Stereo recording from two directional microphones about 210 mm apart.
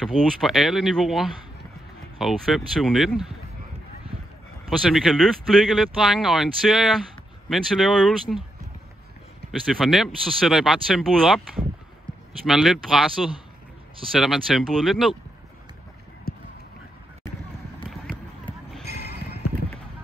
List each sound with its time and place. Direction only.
0.0 s speech: centre (ahead or behind)
4.6 s speech: centre (ahead or behind)
9.5 s speech: centre (ahead or behind)
16.3 s clip-clop: 45° left (ahead or behind)